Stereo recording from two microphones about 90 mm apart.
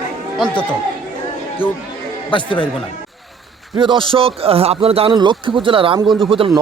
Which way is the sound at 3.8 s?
65° right (ahead or behind).